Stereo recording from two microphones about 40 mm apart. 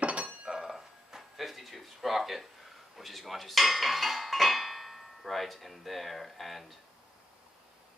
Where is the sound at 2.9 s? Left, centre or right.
Centre.